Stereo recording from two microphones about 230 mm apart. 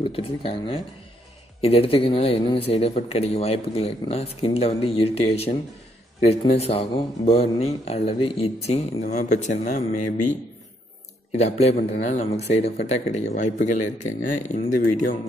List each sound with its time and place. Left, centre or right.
0.0 s speech: left
11.3 s speech: left